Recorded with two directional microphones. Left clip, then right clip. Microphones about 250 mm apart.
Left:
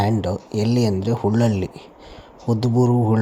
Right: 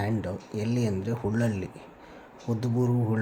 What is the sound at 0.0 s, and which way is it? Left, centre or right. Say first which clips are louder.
Speech: left 10 dB; left.